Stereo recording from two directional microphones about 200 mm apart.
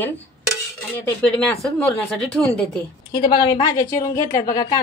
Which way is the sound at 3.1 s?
20° left (ahead or behind).